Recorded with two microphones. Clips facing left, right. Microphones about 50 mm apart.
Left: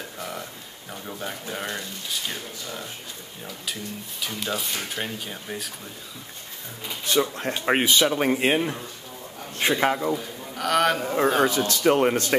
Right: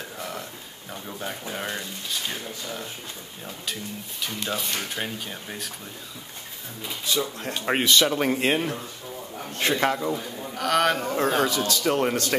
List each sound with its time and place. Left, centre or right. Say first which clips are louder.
1.5 s speech: left 1 dB; centre
4.2 s speech: even; centre
7.2 s speech: left 8 dB; left
7.5 s a man's voice: even; centre
11.4 s speech: left 2 dB; left
11.8 s speech: left 5 dB; left